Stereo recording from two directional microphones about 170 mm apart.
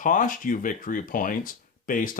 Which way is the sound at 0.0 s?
50° left (ahead or behind).